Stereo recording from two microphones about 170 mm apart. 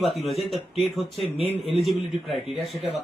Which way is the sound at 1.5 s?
35° right (ahead or behind).